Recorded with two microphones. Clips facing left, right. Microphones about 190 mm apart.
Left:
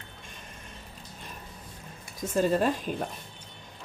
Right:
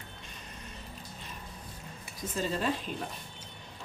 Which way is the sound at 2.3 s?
50° left (ahead or behind).